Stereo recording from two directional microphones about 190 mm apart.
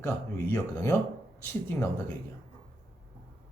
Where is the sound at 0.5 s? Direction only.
15° left (ahead or behind).